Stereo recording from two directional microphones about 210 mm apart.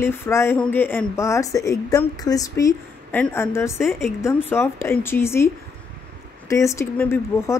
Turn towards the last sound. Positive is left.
turn(degrees=10)  # may be behind; listen again after turning